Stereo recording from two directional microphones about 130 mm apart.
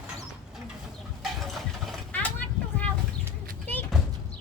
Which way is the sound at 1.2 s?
Centre (ahead or behind).